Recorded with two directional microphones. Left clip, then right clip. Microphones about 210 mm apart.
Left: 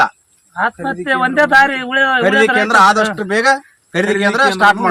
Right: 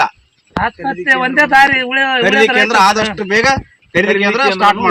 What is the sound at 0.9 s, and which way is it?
Speech, 5° right (ahead or behind).